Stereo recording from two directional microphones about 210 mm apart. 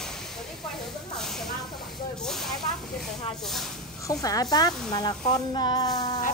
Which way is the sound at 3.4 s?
Centre (ahead or behind).